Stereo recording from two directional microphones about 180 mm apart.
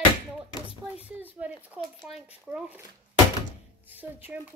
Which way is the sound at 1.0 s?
10° right (ahead or behind).